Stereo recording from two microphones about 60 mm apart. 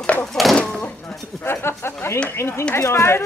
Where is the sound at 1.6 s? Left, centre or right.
Left.